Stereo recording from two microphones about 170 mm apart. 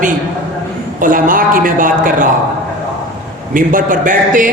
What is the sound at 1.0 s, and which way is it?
A woman's voice, 55° right (ahead or behind).